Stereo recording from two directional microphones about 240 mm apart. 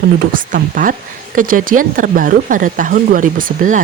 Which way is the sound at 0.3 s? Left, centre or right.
Right.